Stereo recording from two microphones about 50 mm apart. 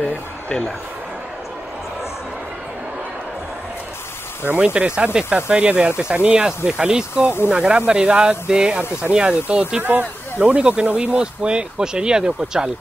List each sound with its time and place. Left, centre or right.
0.0 s a sound: centre
4.6 s speech: right
9.8 s speech: right; by 12.7 s centre